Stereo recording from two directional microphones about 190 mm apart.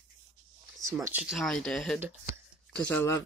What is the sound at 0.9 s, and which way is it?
Speech, 10° right (ahead or behind).